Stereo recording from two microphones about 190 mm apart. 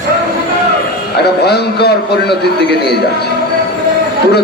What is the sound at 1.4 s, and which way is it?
Speech, 60° left (ahead or behind).